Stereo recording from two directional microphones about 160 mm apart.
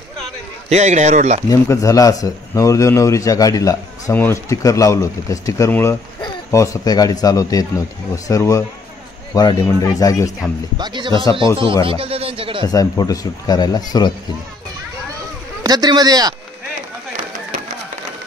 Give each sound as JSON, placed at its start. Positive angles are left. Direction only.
{"t": 0.7, "sound": "a man's voice", "side_deg": -45}
{"t": 1.5, "sound": "a man's voice", "side_deg": 20}
{"t": 10.8, "sound": "a man's voice", "side_deg": -30}
{"t": 12.6, "sound": "a man's voice", "side_deg": 20}
{"t": 15.6, "sound": "a man's voice", "side_deg": -25}